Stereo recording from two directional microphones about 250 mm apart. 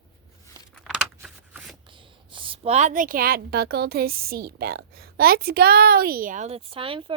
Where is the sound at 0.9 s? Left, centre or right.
Centre.